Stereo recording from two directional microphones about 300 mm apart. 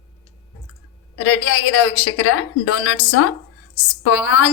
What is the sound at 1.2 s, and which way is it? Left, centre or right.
A woman's voice, left.